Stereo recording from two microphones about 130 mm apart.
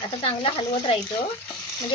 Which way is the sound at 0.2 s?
45° left (ahead or behind).